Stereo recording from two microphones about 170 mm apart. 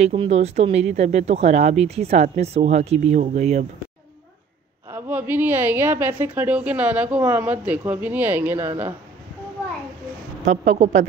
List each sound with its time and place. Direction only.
0.0 s speech: 35° right (ahead or behind)
4.9 s a woman's voice: 10° right (ahead or behind)
10.4 s speech: 45° right (ahead or behind)